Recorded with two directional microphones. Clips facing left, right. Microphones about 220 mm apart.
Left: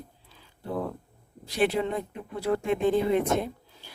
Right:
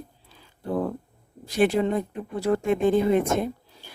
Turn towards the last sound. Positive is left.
turn(degrees=-50)  # may be behind; listen again after turning